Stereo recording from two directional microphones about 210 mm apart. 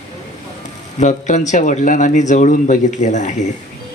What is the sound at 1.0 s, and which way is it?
Speech, 35° left (ahead or behind).